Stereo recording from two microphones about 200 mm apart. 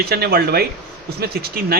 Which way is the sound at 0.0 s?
50° right (ahead or behind).